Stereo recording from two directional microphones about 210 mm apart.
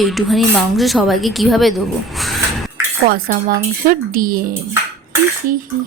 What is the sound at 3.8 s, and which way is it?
Speech, 45° right (ahead or behind).